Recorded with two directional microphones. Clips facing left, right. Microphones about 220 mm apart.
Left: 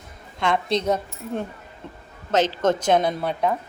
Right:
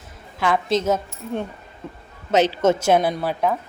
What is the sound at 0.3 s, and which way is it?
A woman's voice, 5° right (ahead or behind).